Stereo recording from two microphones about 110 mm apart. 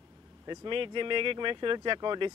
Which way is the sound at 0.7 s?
50° right (ahead or behind).